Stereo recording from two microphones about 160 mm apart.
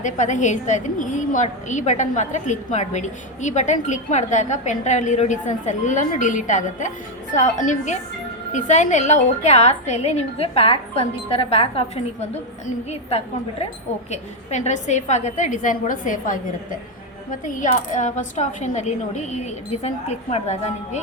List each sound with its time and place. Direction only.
0.0 s a woman's voice: 50° left (ahead or behind)
17.4 s a woman's voice: 55° left (ahead or behind)